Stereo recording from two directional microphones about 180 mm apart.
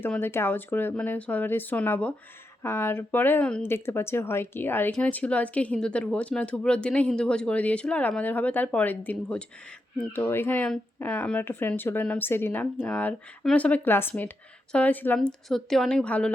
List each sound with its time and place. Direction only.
0.0 s speech: 10° left (ahead or behind)